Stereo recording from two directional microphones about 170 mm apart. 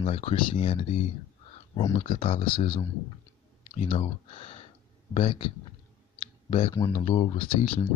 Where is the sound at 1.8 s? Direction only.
20° left (ahead or behind).